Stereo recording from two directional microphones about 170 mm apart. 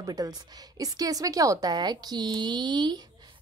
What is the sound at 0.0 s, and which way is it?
A woman's voice, 20° right (ahead or behind).